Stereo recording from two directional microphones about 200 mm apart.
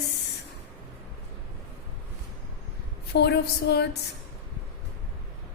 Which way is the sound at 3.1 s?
55° left (ahead or behind).